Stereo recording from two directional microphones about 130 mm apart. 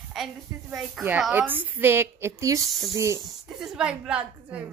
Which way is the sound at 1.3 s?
15° right (ahead or behind).